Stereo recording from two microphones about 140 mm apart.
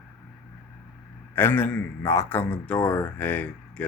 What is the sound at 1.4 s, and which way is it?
A man's voice, 15° left (ahead or behind).